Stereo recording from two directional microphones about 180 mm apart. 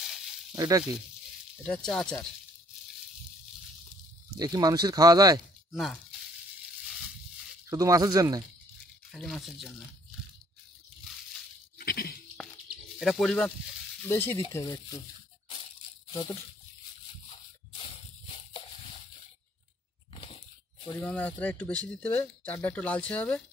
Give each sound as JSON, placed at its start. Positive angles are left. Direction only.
{"t": 0.6, "sound": "speech", "side_deg": -20}
{"t": 1.6, "sound": "speech", "side_deg": 5}
{"t": 4.4, "sound": "speech", "side_deg": -20}
{"t": 5.7, "sound": "speech", "side_deg": 0}
{"t": 7.7, "sound": "speech", "side_deg": -20}
{"t": 9.1, "sound": "speech", "side_deg": 0}
{"t": 11.8, "sound": "goat", "side_deg": 55}
{"t": 13.0, "sound": "speech", "side_deg": 0}
{"t": 14.0, "sound": "speech", "side_deg": 10}
{"t": 14.5, "sound": "tearing", "side_deg": 20}
{"t": 16.1, "sound": "speech", "side_deg": 25}
{"t": 17.3, "sound": "a sound", "side_deg": 30}
{"t": 20.2, "sound": "a sound", "side_deg": 30}
{"t": 21.0, "sound": "speech", "side_deg": 5}